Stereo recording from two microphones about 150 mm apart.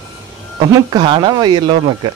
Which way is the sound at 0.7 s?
25° right (ahead or behind).